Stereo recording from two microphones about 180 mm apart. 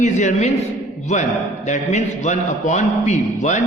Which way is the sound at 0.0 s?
40° left (ahead or behind).